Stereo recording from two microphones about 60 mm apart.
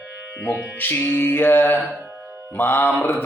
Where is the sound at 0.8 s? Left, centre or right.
Left.